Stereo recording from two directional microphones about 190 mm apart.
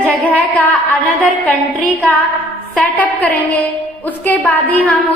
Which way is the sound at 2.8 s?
10° left (ahead or behind).